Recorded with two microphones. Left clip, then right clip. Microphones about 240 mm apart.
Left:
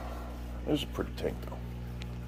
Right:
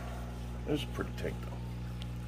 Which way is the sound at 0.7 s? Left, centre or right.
Centre.